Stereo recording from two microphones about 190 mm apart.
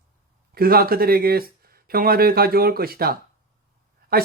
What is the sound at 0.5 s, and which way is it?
Speech, 50° right (ahead or behind).